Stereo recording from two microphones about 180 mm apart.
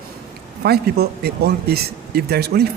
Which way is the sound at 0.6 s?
60° right (ahead or behind).